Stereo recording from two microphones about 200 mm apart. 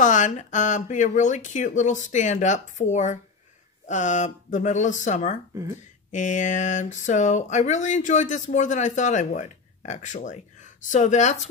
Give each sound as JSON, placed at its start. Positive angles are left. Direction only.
{"t": 0.0, "sound": "speech", "side_deg": 40}